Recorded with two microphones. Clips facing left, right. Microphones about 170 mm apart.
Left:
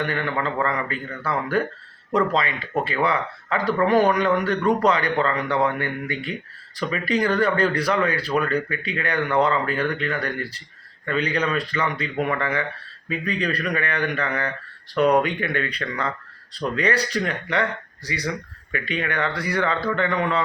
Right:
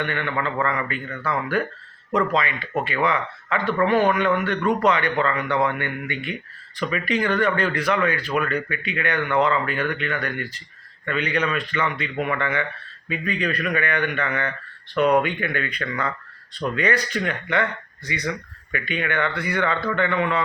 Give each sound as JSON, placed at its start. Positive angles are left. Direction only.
{"t": 0.0, "sound": "speech", "side_deg": 35}